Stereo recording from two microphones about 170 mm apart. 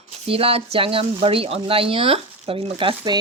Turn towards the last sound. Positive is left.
turn(degrees=-30)  # may be behind; listen again after turning